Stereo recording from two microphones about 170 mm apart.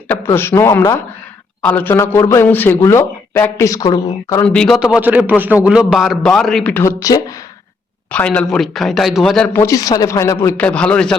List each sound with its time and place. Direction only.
0.1 s speech: 15° left (ahead or behind)
4.4 s speech: 5° left (ahead or behind); by 7.4 s 20° left (ahead or behind)
8.1 s speech: 5° left (ahead or behind)